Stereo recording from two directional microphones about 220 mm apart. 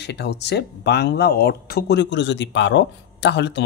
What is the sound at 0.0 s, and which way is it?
Speech, 50° left (ahead or behind).